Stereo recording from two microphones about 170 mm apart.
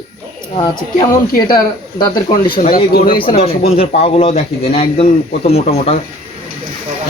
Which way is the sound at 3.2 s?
35° left (ahead or behind).